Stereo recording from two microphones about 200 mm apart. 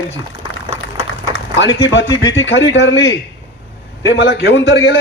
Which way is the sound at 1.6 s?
65° left (ahead or behind).